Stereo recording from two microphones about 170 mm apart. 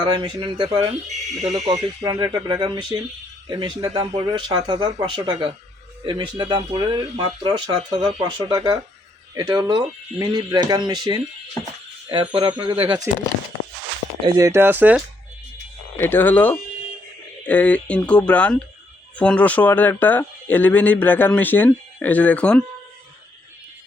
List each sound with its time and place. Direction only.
0.0 s speech: 25° right (ahead or behind)
1.0 s speech: 40° right (ahead or behind)
2.0 s speech: 25° right (ahead or behind)
14.3 s speech: 20° right (ahead or behind)
16.0 s speech: 10° left (ahead or behind)